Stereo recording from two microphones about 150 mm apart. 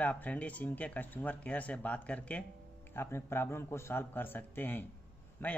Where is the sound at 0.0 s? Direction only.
10° left (ahead or behind).